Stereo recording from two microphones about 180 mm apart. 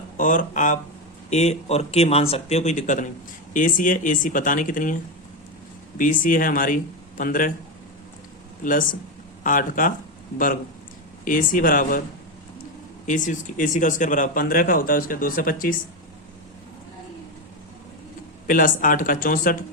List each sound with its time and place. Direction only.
0.2 s speech: 45° left (ahead or behind)
6.0 s speech: 50° left (ahead or behind)
8.6 s speech: 50° left (ahead or behind)
13.1 s speech: 45° left (ahead or behind)
18.4 s speech: 50° left (ahead or behind)